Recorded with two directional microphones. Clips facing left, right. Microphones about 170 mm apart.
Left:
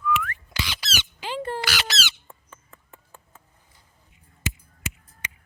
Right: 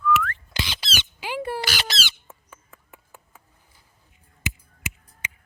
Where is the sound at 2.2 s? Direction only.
5° right (ahead or behind).